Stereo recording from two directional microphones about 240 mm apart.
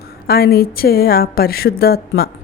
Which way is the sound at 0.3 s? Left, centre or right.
Left.